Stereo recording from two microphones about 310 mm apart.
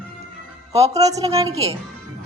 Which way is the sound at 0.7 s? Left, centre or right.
Centre.